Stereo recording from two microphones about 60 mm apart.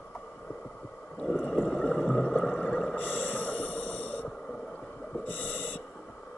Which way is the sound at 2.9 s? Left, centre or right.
Left.